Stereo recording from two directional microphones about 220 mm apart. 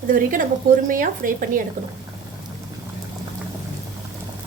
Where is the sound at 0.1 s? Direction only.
40° right (ahead or behind).